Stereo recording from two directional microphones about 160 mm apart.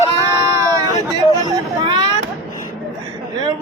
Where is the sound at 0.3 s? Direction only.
20° right (ahead or behind).